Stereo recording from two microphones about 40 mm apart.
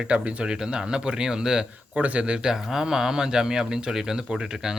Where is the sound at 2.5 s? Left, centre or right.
Centre.